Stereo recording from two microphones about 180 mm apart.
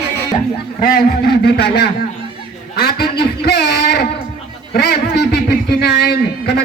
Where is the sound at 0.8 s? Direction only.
55° left (ahead or behind).